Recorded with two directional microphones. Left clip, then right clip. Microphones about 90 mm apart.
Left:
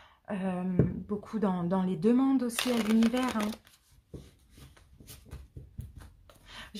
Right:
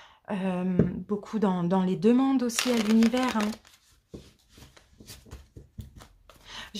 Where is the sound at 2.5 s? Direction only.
10° right (ahead or behind).